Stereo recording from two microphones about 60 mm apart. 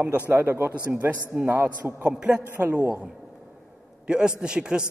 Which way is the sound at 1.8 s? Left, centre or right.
Right.